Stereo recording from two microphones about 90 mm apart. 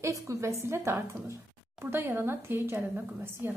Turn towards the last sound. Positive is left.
turn(degrees=-25)  # may be behind; listen again after turning